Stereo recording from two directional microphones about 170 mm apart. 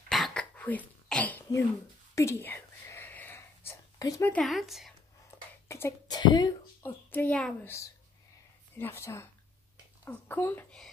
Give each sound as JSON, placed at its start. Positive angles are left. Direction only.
{"t": 0.1, "sound": "cough", "side_deg": 5}
{"t": 2.1, "sound": "whispering", "side_deg": 15}
{"t": 4.4, "sound": "speech", "side_deg": 0}
{"t": 5.7, "sound": "speech", "side_deg": 15}
{"t": 6.8, "sound": "a woman's voice", "side_deg": 10}